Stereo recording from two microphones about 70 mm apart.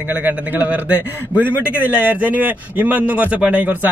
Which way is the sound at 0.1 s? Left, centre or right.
Right.